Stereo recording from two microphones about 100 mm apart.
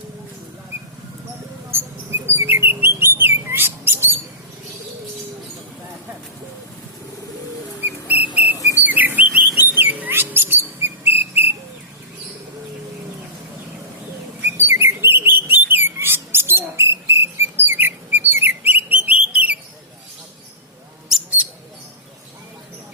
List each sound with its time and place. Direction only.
1.7 s bird: 25° right (ahead or behind)
7.8 s whistle: 15° right (ahead or behind)
8.5 s whistle: 35° left (ahead or behind)
8.8 s bird: 15° right (ahead or behind)
10.8 s whistle: 20° right (ahead or behind)
14.5 s bird: 25° right (ahead or behind)
21.1 s mouse: 10° right (ahead or behind)